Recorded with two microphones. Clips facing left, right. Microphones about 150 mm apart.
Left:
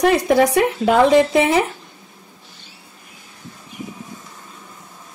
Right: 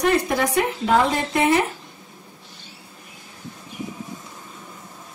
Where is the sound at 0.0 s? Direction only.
80° left.